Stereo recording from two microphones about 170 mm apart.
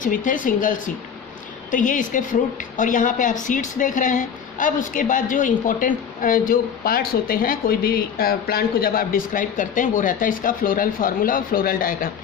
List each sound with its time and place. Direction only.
0.0 s a woman's voice: 50° left (ahead or behind)